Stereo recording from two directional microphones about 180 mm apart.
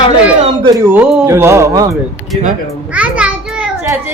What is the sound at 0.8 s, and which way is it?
Speech, 10° right (ahead or behind).